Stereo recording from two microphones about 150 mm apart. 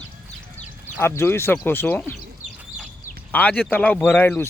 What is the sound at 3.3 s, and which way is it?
Speech, 10° left (ahead or behind).